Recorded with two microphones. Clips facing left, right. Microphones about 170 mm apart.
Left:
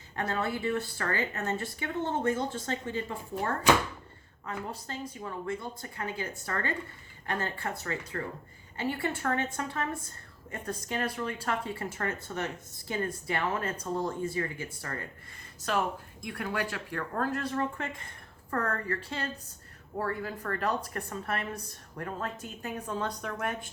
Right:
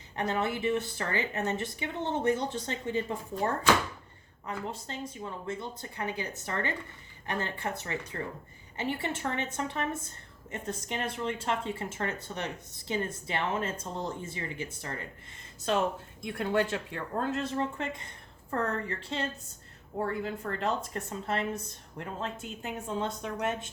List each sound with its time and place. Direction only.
0.2 s a woman's voice: 20° right (ahead or behind)
4.4 s a woman's voice: 25° right (ahead or behind)